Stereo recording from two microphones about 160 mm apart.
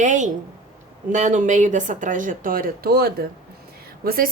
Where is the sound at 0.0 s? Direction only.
50° right (ahead or behind).